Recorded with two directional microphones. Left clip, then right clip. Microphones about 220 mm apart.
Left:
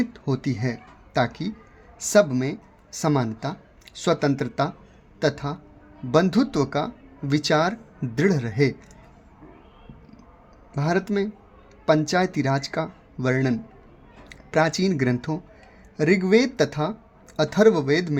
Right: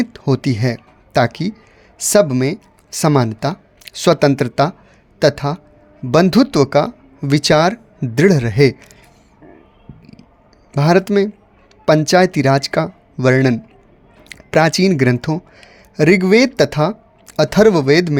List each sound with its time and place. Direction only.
0.0 s speech: 40° right (ahead or behind)
10.7 s speech: 45° right (ahead or behind)